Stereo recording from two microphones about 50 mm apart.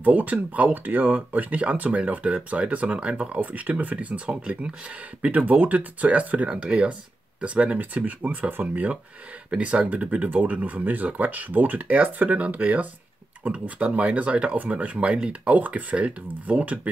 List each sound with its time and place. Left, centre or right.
0.0 s speech: right
9.5 s speech: right